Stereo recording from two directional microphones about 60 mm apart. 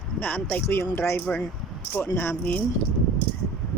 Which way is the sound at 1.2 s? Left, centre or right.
Left.